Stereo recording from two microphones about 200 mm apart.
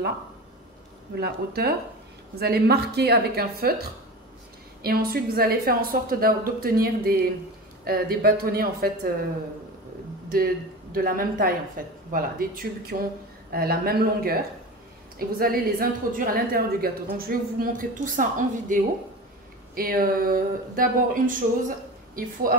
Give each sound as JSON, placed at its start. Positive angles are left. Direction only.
{"t": 1.1, "sound": "a woman's voice", "side_deg": -55}
{"t": 4.8, "sound": "a woman's voice", "side_deg": -50}
{"t": 10.3, "sound": "a woman's voice", "side_deg": -45}